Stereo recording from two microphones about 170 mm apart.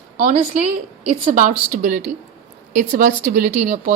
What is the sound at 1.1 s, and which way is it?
A woman's voice, 40° right (ahead or behind).